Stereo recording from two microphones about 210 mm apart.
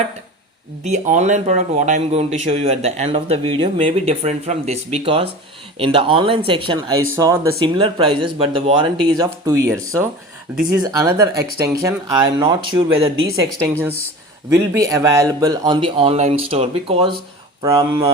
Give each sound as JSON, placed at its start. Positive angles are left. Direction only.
{"t": 0.9, "sound": "a man's voice", "side_deg": -35}
{"t": 14.5, "sound": "speech", "side_deg": -15}